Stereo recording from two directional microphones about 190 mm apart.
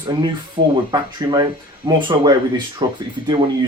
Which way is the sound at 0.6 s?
30° right (ahead or behind).